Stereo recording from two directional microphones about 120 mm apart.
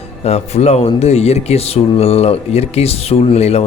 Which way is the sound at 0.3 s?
60° left (ahead or behind).